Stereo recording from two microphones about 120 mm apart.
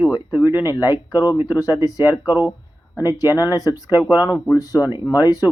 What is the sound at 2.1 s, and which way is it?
Speech, 15° right (ahead or behind).